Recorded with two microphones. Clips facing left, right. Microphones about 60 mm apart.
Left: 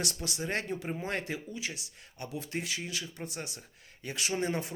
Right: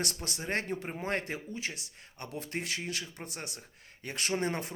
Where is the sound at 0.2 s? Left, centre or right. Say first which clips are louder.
Even; right.